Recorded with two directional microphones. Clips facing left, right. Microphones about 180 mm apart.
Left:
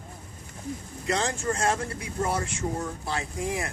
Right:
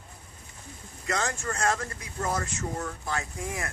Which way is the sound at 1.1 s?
30° left (ahead or behind).